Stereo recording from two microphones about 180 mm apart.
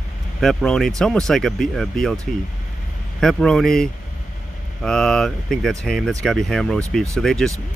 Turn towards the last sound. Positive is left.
turn(degrees=5)  # may be behind; listen again after turning